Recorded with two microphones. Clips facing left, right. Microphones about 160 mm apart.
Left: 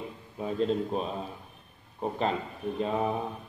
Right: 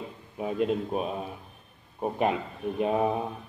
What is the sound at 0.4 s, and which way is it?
A man's voice, 10° right (ahead or behind).